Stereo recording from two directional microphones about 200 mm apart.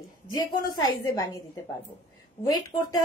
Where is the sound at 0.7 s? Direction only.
15° left (ahead or behind).